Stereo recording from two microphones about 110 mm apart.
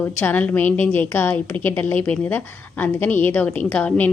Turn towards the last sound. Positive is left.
turn(degrees=15)  # may be behind; listen again after turning